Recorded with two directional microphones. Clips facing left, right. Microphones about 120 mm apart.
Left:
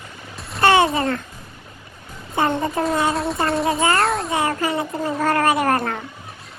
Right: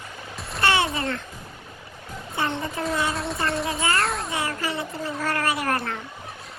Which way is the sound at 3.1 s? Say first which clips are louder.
Left 5 dB; centre (ahead or behind).